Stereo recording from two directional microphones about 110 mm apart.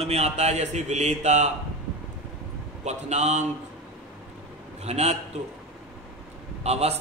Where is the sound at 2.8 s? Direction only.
90° right.